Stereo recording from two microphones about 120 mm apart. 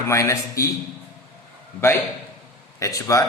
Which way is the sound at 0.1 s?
25° left (ahead or behind).